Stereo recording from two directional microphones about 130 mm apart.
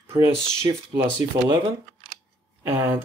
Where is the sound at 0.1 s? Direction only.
30° right (ahead or behind).